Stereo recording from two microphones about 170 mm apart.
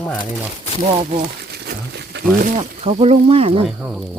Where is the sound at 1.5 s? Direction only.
75° right (ahead or behind).